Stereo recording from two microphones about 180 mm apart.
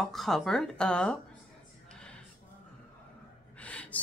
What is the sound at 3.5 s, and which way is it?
Gasp, 5° left (ahead or behind).